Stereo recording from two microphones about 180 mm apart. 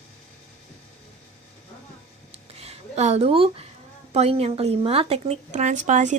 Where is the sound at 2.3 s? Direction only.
35° right (ahead or behind).